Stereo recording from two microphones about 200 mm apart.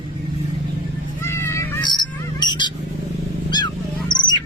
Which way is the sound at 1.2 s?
15° left (ahead or behind).